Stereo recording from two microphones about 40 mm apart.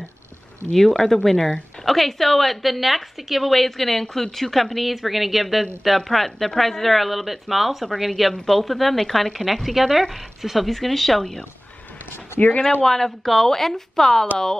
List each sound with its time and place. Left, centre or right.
0.7 s a woman's voice: centre
12.4 s speech: left
12.8 s speech: centre